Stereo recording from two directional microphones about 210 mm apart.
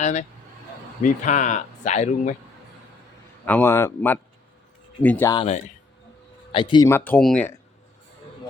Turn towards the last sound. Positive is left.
turn(degrees=5)  # may be behind; listen again after turning